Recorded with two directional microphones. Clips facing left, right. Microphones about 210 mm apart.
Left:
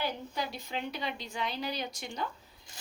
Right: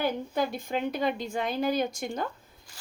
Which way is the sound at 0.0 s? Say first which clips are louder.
Right 7 dB; 50° right (ahead or behind).